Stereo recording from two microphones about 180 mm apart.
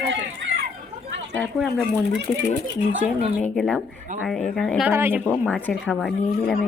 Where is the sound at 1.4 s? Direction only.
Centre (ahead or behind).